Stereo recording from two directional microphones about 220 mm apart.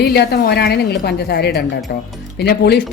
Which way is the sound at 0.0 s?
45° left (ahead or behind).